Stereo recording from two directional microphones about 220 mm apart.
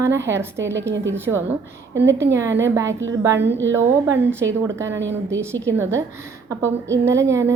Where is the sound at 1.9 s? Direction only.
55° right (ahead or behind).